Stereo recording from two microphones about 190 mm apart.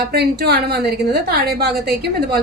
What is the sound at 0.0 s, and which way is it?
A woman's voice, 55° right (ahead or behind).